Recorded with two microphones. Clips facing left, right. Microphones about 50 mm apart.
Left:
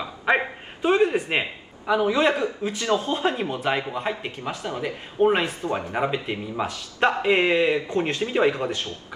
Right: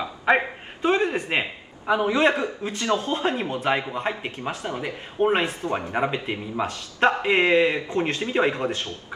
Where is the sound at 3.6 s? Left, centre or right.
Centre.